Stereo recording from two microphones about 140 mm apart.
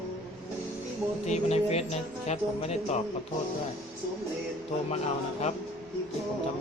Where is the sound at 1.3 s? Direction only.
50° left (ahead or behind).